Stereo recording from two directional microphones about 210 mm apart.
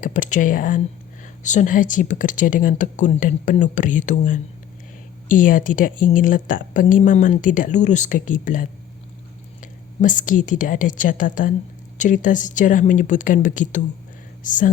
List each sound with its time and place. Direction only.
0.0 s a woman's voice: 35° left (ahead or behind)
10.0 s a woman's voice: 40° left (ahead or behind)